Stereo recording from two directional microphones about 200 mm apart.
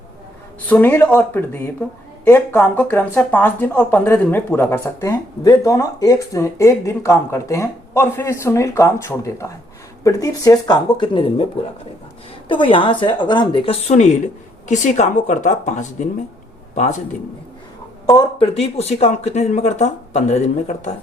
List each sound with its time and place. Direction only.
0.7 s speech: 10° left (ahead or behind); by 11.4 s 25° left (ahead or behind)
12.5 s speech: 25° left (ahead or behind)
18.0 s speech: 20° left (ahead or behind)
18.4 s speech: 30° left (ahead or behind)